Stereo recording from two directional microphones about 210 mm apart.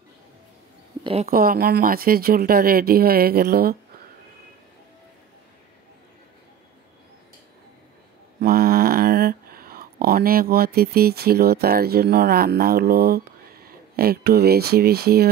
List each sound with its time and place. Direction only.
1.0 s speech: 30° right (ahead or behind)
1.3 s speech: 45° right (ahead or behind)
8.4 s a sound: 45° right (ahead or behind)